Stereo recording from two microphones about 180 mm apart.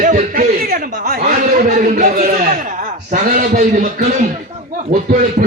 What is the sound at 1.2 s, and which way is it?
A man's voice, 50° right (ahead or behind).